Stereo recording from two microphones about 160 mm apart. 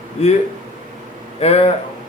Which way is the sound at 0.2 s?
40° left (ahead or behind).